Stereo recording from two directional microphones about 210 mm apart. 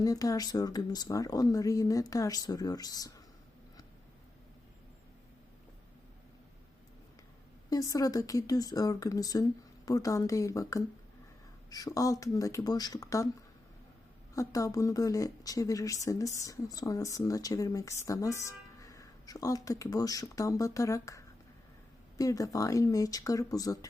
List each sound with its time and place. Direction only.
0.0 s speech: 15° left (ahead or behind)
7.7 s speech: 15° left (ahead or behind)
14.3 s speech: 15° left (ahead or behind)